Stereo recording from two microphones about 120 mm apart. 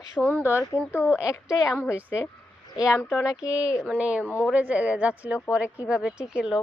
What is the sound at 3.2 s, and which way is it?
Speech, 30° left (ahead or behind).